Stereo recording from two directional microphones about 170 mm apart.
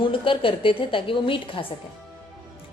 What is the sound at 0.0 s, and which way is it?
A woman's voice, 30° left (ahead or behind).